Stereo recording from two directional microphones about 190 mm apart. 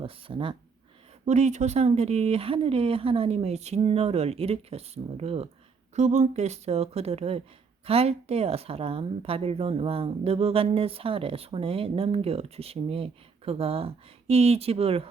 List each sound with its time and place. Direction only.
0.0 s a woman's voice: 25° right (ahead or behind)